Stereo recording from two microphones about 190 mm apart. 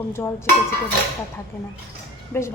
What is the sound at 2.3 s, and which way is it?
Speech, 10° left (ahead or behind).